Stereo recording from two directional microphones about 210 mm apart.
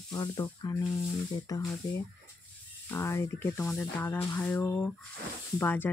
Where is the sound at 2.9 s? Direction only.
15° left (ahead or behind).